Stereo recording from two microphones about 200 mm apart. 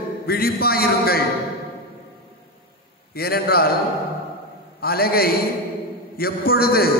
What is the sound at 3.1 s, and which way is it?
Speech, 50° left (ahead or behind).